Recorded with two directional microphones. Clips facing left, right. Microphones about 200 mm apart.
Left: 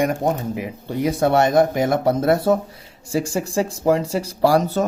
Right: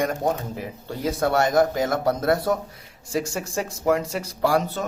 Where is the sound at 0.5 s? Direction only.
15° left (ahead or behind).